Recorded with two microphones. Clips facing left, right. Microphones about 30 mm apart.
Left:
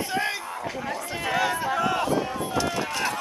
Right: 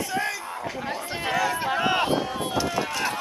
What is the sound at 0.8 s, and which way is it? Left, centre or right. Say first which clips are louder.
Run: even; right.